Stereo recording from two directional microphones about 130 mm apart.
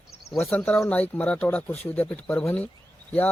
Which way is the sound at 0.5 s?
10° left (ahead or behind).